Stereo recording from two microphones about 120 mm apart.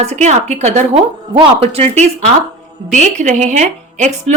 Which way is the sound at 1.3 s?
55° right (ahead or behind).